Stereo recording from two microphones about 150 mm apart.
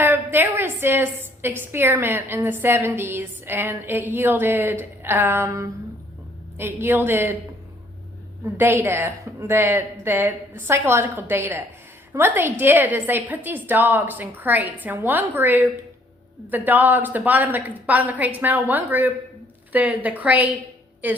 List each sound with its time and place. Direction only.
0.0 s a woman's voice: 15° right (ahead or behind)
8.5 s a woman's voice: 15° right (ahead or behind)